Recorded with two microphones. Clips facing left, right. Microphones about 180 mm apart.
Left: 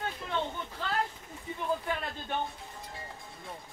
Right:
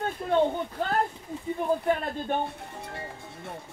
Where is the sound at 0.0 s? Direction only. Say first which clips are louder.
Right 10 dB; 45° right (ahead or behind).